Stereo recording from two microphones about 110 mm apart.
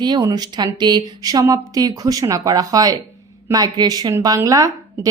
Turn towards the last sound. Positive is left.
turn(degrees=-30)  # may be behind; listen again after turning